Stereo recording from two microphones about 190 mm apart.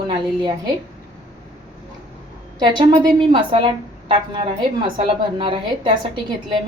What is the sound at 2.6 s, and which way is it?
A woman's voice, 25° right (ahead or behind).